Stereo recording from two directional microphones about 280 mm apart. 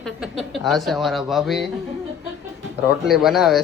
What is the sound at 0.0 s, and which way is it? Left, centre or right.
A man's voice, centre.